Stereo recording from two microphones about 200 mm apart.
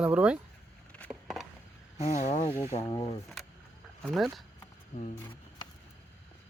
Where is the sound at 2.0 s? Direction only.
35° left (ahead or behind).